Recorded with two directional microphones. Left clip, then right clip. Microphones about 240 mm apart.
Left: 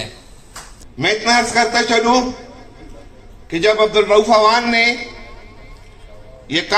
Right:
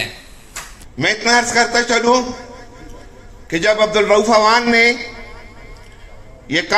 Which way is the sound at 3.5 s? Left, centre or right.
Right.